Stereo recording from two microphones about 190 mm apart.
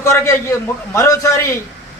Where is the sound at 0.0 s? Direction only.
15° left (ahead or behind).